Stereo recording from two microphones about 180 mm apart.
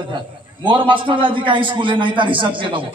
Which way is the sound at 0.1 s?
25° right (ahead or behind).